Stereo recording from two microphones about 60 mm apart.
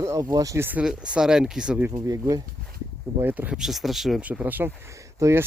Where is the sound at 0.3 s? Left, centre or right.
Right.